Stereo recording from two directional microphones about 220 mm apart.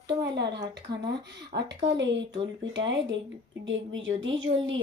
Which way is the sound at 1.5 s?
55° right (ahead or behind).